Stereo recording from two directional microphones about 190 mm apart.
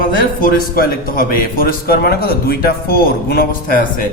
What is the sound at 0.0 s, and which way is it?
A man's voice, 45° left (ahead or behind).